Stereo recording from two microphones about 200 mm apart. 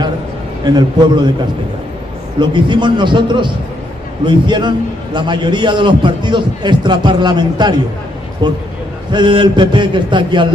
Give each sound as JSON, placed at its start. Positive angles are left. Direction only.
{"t": 0.7, "sound": "a man's voice", "side_deg": -20}
{"t": 2.5, "sound": "a man's voice", "side_deg": -25}